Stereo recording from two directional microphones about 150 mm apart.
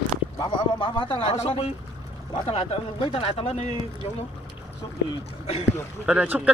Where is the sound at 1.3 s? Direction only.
45° left (ahead or behind).